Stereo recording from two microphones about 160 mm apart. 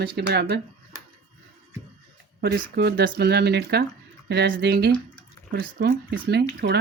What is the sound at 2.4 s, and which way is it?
Speech, 90° right.